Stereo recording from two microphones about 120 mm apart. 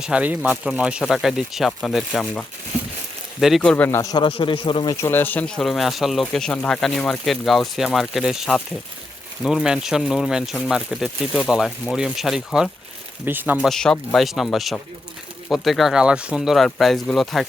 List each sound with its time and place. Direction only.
0.0 s speech: 10° right (ahead or behind)
3.6 s a man's voice: 10° left (ahead or behind)
3.8 s a man's voice: 20° left (ahead or behind)
4.1 s a man's voice: 45° left (ahead or behind)
4.9 s speech: 20° left (ahead or behind); by 12.7 s centre (ahead or behind)
13.2 s speech: 15° right (ahead or behind)
13.7 s speech: 5° left (ahead or behind)